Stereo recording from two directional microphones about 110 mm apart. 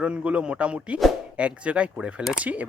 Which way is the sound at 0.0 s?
10° right (ahead or behind).